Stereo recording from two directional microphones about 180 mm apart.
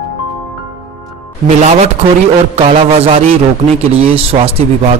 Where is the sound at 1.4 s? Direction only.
40° right (ahead or behind).